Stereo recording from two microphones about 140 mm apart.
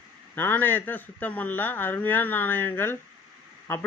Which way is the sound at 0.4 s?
15° left (ahead or behind).